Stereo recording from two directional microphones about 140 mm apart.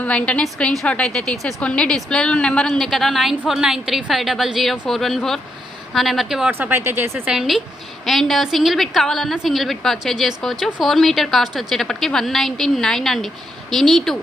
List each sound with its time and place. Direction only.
0.0 s a woman's voice: 10° left (ahead or behind)
6.5 s speech: 15° right (ahead or behind)
7.3 s a woman's voice: centre (ahead or behind)